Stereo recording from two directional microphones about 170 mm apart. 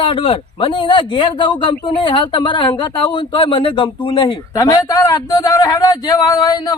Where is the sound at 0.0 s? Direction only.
30° left (ahead or behind).